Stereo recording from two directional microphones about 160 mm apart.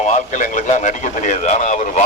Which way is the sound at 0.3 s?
50° left (ahead or behind).